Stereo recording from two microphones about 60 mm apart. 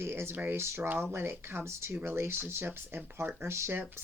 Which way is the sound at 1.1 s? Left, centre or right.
Right.